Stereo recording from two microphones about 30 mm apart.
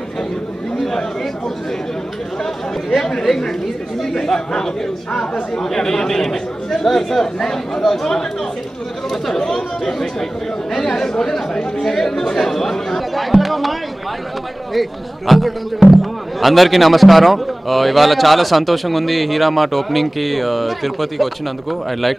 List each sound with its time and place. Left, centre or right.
3.2 s speech: centre
9.5 s speech: centre
13.1 s chatter: centre
14.7 s speech: centre